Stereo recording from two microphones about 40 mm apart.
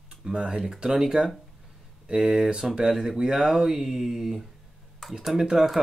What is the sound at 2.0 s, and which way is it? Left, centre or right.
Speech, right.